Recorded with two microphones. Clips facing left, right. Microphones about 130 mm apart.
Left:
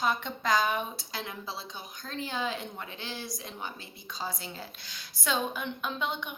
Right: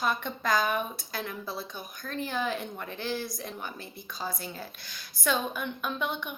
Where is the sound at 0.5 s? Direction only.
50° right (ahead or behind).